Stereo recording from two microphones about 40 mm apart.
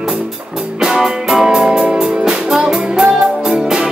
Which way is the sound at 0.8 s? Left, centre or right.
Centre.